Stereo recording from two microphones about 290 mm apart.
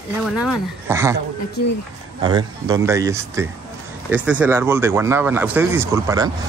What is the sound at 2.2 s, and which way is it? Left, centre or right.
Speech, centre.